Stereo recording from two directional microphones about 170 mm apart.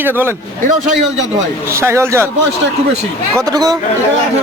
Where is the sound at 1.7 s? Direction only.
15° right (ahead or behind).